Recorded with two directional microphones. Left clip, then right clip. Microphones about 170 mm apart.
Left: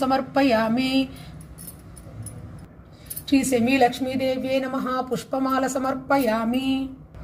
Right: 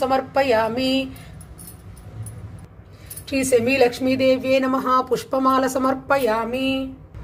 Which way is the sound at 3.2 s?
35° right (ahead or behind).